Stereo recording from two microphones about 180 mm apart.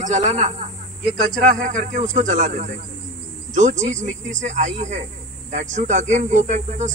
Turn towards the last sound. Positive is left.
turn(degrees=-40)  # may be behind; listen again after turning